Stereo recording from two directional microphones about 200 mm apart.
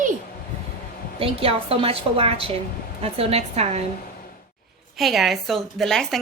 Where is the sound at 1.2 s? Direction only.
30° right (ahead or behind).